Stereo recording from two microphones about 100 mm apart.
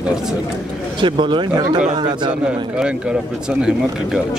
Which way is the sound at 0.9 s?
55° right (ahead or behind).